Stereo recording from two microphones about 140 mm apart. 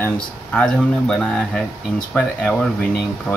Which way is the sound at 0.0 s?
10° left (ahead or behind).